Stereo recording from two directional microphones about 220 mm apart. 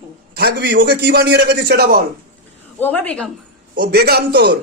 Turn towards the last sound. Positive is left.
turn(degrees=-45)  # may be behind; listen again after turning